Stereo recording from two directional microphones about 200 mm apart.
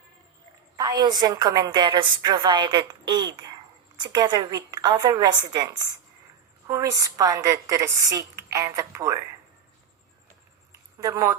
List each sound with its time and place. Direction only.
0.8 s a woman's voice: 20° right (ahead or behind)
11.0 s speech: 15° right (ahead or behind)